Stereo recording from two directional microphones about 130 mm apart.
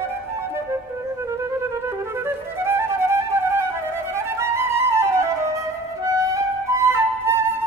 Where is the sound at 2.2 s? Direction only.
20° right (ahead or behind).